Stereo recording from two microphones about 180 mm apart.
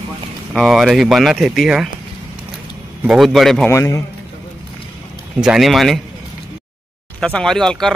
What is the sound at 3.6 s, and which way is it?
Speech, 15° left (ahead or behind).